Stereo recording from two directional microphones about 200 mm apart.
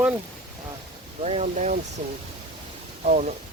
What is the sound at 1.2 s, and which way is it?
Speech, 35° right (ahead or behind).